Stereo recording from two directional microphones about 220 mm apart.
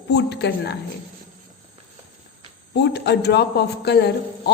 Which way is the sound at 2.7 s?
50° left (ahead or behind).